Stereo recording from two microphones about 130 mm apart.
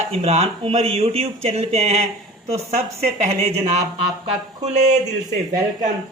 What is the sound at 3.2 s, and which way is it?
Speech, 60° right (ahead or behind).